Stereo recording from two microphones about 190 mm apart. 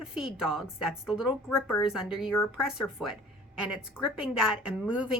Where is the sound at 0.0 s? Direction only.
5° right (ahead or behind).